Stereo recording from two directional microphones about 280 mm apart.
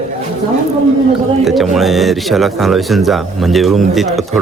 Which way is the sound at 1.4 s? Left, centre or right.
Centre.